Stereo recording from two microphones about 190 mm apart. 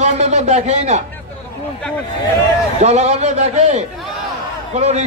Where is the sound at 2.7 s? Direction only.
35° right (ahead or behind).